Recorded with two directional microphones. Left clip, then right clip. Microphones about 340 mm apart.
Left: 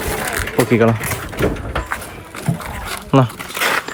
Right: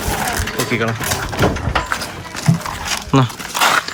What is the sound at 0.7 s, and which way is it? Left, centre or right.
Speech, centre.